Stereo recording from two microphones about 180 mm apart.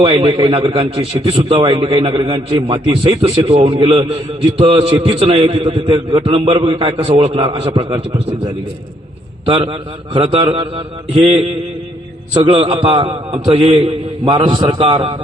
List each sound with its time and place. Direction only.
0.0 s a man's voice: 30° right (ahead or behind)
9.5 s a man's voice: 25° right (ahead or behind)